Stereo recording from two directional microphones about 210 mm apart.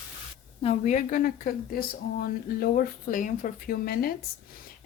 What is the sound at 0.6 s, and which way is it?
Speech, 35° left (ahead or behind).